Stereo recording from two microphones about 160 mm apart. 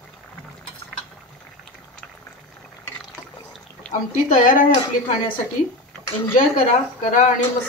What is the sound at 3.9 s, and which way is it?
Speech, 50° left (ahead or behind).